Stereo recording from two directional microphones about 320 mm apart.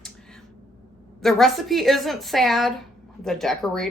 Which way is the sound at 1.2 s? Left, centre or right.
Centre.